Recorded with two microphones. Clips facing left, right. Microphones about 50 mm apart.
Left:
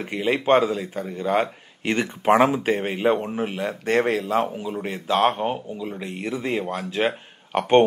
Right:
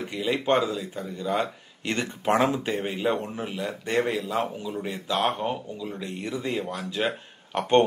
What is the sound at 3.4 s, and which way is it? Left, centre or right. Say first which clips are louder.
Speech: left 5 dB; left.